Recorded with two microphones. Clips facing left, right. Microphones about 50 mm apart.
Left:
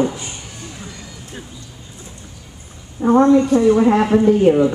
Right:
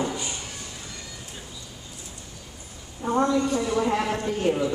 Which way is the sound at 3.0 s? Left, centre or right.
Left.